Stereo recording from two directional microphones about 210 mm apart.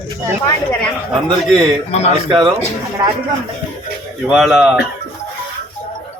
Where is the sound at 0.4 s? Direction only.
10° left (ahead or behind).